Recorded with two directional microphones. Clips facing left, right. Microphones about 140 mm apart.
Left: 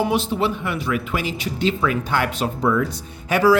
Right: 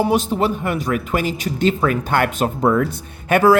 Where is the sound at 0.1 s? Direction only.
45° right (ahead or behind).